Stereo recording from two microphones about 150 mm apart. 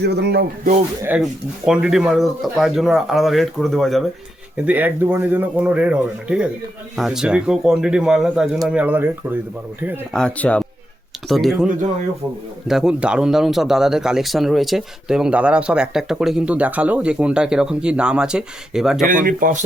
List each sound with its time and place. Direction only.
0.0 s speech: 90° right
1.0 s speech: 5° right (ahead or behind)
4.6 s speech: 10° right (ahead or behind)
10.1 s speech: 5° left (ahead or behind)
19.0 s speech: 65° right (ahead or behind)